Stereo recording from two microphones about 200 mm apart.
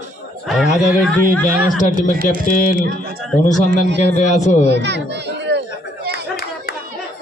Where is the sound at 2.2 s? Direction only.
40° left (ahead or behind).